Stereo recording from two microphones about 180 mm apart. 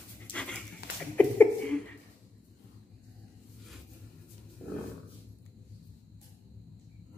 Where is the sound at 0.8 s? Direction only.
60° left (ahead or behind).